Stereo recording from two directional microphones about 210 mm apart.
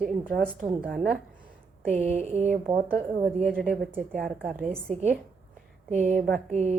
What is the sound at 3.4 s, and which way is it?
Speech, 5° left (ahead or behind).